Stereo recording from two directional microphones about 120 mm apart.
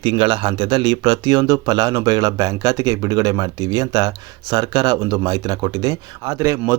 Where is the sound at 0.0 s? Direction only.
40° right (ahead or behind).